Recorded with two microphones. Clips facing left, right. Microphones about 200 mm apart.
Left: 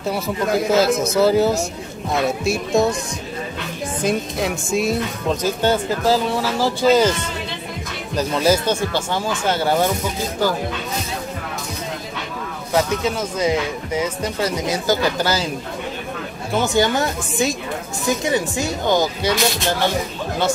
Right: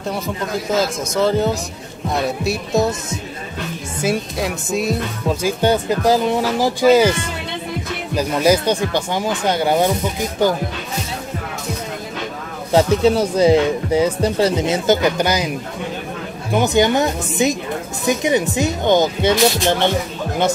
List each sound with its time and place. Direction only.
1.1 s speech: 5° left (ahead or behind)
4.0 s speech: 5° right (ahead or behind)
5.4 s speech: 15° right (ahead or behind)
8.2 s speech: 15° right (ahead or behind)
12.7 s speech: 35° right (ahead or behind); by 15.5 s 15° right (ahead or behind)
16.5 s speech: 20° right (ahead or behind)